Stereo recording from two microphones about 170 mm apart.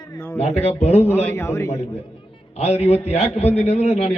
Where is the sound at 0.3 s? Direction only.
35° left (ahead or behind).